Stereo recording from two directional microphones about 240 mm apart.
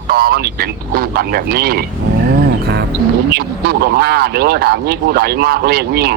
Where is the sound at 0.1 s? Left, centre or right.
Right.